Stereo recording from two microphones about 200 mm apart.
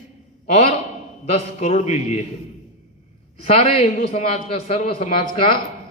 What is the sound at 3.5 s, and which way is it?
A man's voice, 30° left (ahead or behind).